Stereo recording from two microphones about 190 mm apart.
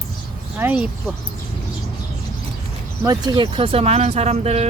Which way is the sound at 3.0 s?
20° right (ahead or behind).